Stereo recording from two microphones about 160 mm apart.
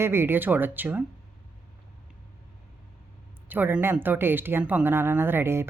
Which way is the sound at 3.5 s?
10° right (ahead or behind).